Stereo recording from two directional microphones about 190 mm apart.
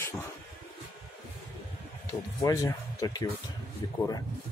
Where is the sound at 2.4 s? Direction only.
15° left (ahead or behind).